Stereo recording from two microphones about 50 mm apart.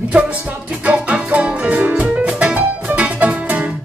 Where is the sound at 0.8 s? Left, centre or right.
Right.